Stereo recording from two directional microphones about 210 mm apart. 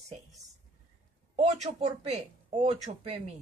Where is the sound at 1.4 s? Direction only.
30° right (ahead or behind).